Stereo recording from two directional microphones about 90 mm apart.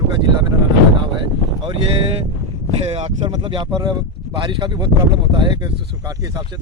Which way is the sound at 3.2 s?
65° right (ahead or behind).